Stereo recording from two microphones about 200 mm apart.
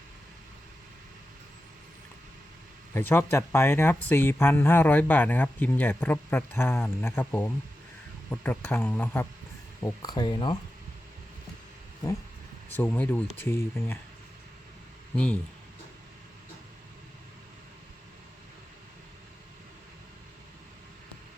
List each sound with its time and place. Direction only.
2.9 s speech: 10° left (ahead or behind)
9.8 s speech: 20° left (ahead or behind)
12.7 s speech: 10° left (ahead or behind)
15.1 s speech: 5° left (ahead or behind)